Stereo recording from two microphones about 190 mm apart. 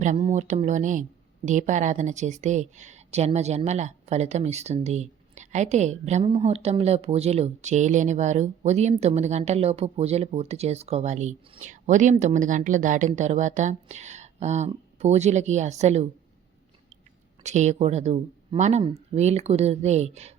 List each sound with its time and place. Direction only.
0.0 s a woman's voice: 35° right (ahead or behind)
17.4 s a woman's voice: 40° right (ahead or behind)